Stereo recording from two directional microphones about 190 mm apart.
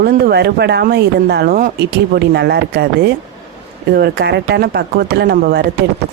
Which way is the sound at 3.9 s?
60° right (ahead or behind).